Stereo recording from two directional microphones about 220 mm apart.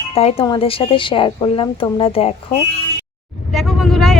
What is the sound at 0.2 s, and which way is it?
A woman's voice, 25° left (ahead or behind).